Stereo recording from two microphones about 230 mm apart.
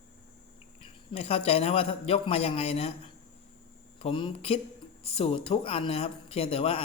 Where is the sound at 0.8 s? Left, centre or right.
Left.